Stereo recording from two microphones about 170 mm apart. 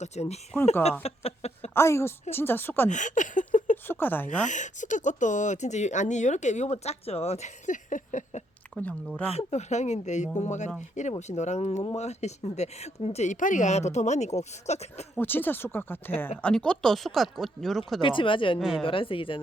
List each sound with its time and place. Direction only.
0.0 s speech: 40° left (ahead or behind)
1.7 s speech: 15° left (ahead or behind)
2.9 s a sound: 45° left (ahead or behind)
3.8 s a woman's voice: 10° left (ahead or behind)
4.3 s speech: 45° left (ahead or behind)
8.7 s speech: 10° left (ahead or behind)
9.2 s speech: 35° left (ahead or behind)
15.2 s speech: 10° left (ahead or behind)
18.0 s a woman's voice: 30° left (ahead or behind)